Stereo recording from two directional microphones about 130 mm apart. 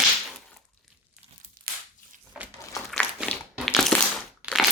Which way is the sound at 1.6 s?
90° right.